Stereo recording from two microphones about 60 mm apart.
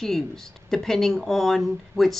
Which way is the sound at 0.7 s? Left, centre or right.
Centre.